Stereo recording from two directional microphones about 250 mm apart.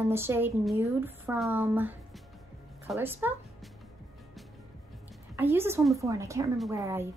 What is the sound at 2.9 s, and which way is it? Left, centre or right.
Speech, centre.